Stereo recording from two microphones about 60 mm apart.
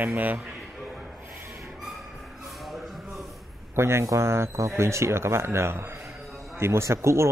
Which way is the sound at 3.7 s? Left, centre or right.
Right.